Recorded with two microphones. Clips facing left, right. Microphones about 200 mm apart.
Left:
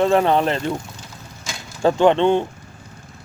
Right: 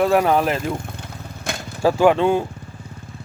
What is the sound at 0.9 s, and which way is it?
Vehicle, 60° right (ahead or behind).